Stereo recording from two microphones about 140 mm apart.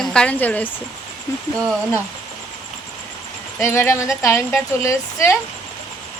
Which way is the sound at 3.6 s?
20° left (ahead or behind).